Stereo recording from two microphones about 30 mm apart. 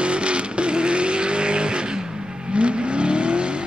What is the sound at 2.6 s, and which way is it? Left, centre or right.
Vehicle, right.